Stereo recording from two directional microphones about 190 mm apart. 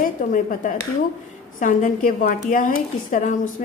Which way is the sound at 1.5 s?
45° left (ahead or behind).